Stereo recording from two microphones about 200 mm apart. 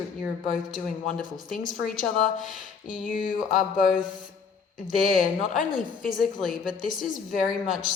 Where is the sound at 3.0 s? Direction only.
40° left (ahead or behind).